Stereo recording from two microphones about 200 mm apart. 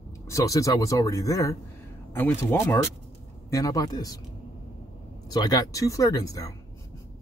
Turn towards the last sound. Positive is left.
turn(degrees=15)  # may be behind; listen again after turning